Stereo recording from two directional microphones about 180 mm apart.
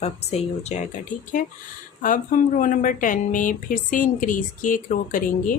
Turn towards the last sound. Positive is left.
turn(degrees=45)  # may be behind; listen again after turning